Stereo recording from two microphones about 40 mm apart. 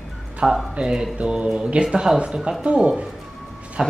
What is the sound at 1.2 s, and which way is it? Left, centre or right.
Mantra, right.